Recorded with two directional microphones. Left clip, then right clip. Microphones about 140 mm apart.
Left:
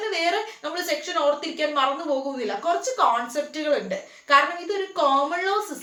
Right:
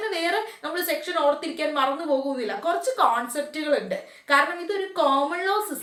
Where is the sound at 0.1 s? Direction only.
25° right (ahead or behind).